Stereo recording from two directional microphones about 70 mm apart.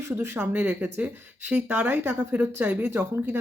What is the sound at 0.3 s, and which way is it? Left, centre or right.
Speech, right.